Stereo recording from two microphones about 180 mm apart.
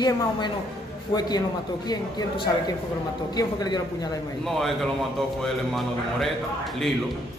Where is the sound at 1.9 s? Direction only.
25° left (ahead or behind).